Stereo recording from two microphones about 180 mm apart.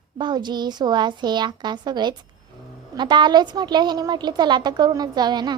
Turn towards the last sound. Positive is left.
turn(degrees=-25)  # may be behind; listen again after turning